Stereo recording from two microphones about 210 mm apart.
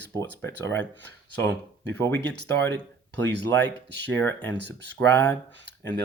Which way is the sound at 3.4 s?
10° left (ahead or behind).